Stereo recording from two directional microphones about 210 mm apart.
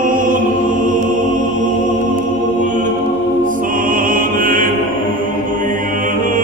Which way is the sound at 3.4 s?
40° right (ahead or behind).